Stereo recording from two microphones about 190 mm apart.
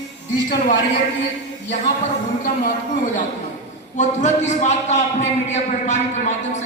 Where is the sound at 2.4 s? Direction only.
45° left (ahead or behind).